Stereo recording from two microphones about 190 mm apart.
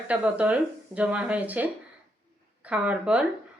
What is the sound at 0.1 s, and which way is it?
A woman's voice, 5° right (ahead or behind).